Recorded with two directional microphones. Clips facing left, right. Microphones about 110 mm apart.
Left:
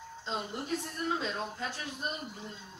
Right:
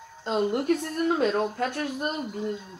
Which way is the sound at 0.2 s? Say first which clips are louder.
Right 12 dB; 60° right (ahead or behind).